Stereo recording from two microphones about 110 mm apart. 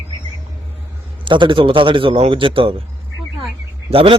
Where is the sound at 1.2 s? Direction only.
50° right (ahead or behind).